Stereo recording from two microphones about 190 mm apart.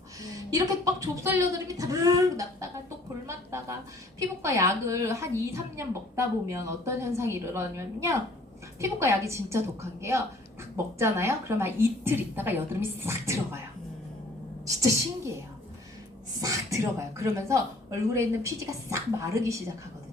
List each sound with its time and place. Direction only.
0.2 s a woman's voice: 20° right (ahead or behind)
3.2 s a sound: 15° right (ahead or behind)
4.2 s a woman's voice: 15° right (ahead or behind)
14.6 s a woman's voice: 15° right (ahead or behind)
16.4 s a woman's voice: 15° right (ahead or behind)